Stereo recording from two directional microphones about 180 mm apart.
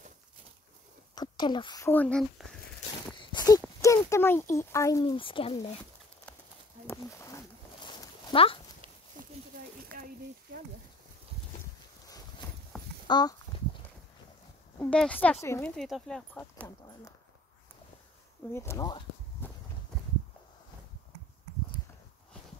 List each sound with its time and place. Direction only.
1.1 s speech: 25° left (ahead or behind)
1.9 s speech: 10° left (ahead or behind)
3.2 s a sound: 25° left (ahead or behind)
3.8 s speech: 15° left (ahead or behind); by 5.8 s 30° left (ahead or behind)
6.9 s a sound: 15° left (ahead or behind)
7.8 s a sound: 25° left (ahead or behind)
13.0 s speech: 25° left (ahead or behind)
14.8 s speech: 5° left (ahead or behind)
18.5 s speech: 15° left (ahead or behind)